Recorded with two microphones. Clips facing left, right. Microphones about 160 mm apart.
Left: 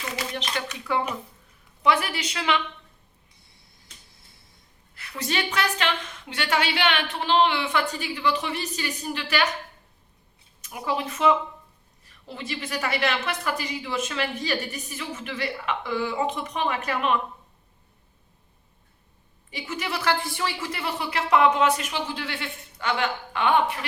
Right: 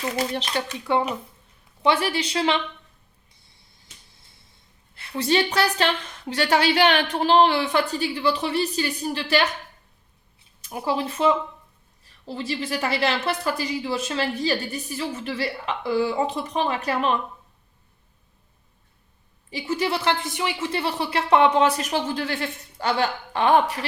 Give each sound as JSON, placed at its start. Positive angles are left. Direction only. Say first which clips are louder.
{"t": 0.2, "sound": "a woman's voice", "louder": "right 4 dB", "side_deg": -35}
{"t": 4.9, "sound": "a woman's voice", "louder": "right 7 dB", "side_deg": -30}
{"t": 10.6, "sound": "a woman's voice", "louder": "right 3 dB", "side_deg": -30}
{"t": 19.5, "sound": "a woman's voice", "louder": "right 7 dB", "side_deg": -30}